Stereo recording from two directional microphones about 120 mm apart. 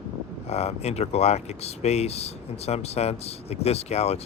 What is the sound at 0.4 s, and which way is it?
Speech, 60° left (ahead or behind).